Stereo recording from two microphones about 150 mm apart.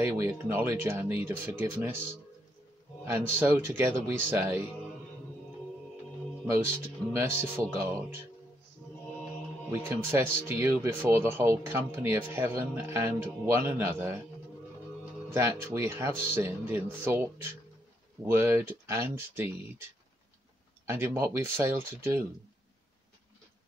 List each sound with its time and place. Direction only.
0.0 s speech: 15° right (ahead or behind)
3.1 s speech: 15° right (ahead or behind)
7.1 s speech: 15° right (ahead or behind)
9.7 s speech: 15° right (ahead or behind)
15.7 s speech: 20° right (ahead or behind)
20.9 s speech: 15° right (ahead or behind)